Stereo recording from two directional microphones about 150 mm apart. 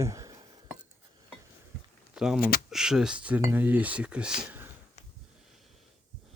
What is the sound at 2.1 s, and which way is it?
Speech, 5° right (ahead or behind).